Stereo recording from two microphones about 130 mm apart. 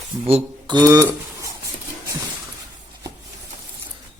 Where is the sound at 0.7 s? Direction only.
30° right (ahead or behind).